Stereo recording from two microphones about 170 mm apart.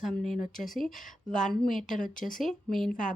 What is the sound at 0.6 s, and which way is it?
A woman's voice, centre (ahead or behind).